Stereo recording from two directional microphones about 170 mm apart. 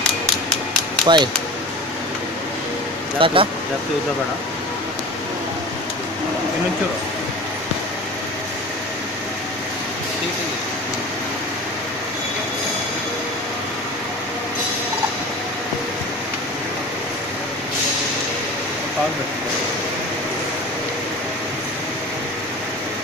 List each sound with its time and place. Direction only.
1.0 s speech: 25° right (ahead or behind)
3.2 s speech: 30° right (ahead or behind)